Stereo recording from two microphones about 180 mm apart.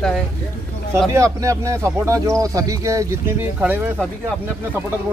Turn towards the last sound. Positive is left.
turn(degrees=-10)  # may be behind; listen again after turning